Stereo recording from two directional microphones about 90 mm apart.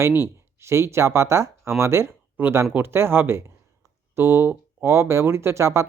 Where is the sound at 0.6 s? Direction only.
30° right (ahead or behind).